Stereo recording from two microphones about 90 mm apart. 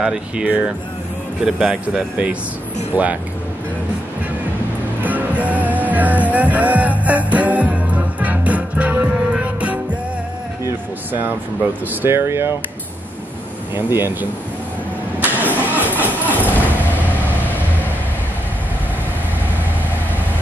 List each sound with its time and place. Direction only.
0.0 s speech: 10° right (ahead or behind)
5.0 s music: 15° right (ahead or behind)
10.7 s a sound: 25° right (ahead or behind)
11.9 s speech: 25° right (ahead or behind)
13.7 s speech: 25° right (ahead or behind)
15.6 s music: 20° right (ahead or behind)
16.3 s a sound: 20° left (ahead or behind)